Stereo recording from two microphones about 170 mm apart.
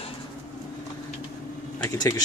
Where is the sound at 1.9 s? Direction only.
20° left (ahead or behind).